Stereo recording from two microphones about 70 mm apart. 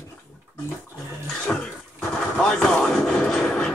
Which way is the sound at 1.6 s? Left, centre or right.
Centre.